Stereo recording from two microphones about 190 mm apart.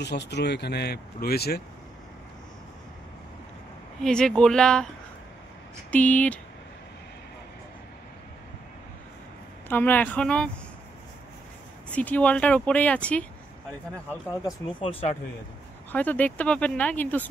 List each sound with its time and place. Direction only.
0.0 s speech: 65° left (ahead or behind)
4.0 s speech: 5° left (ahead or behind)
5.9 s speech: 10° left (ahead or behind)
9.7 s speech: 10° left (ahead or behind)
11.9 s speech: 10° left (ahead or behind)
14.4 s speech: 30° left (ahead or behind)
15.9 s speech: 10° left (ahead or behind)